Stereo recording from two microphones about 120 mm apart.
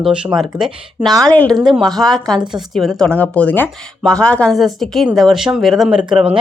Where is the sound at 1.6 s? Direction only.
Centre (ahead or behind).